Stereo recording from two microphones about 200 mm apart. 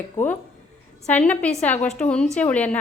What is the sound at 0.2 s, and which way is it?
A woman's voice, 10° left (ahead or behind).